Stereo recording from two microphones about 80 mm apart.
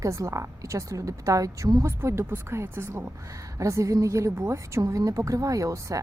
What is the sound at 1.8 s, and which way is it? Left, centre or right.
A woman's voice, right.